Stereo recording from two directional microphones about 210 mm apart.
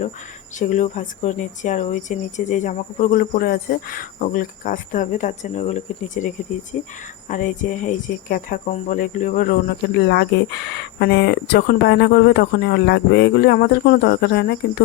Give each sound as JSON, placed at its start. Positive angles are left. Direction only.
{"t": 0.6, "sound": "speech", "side_deg": 35}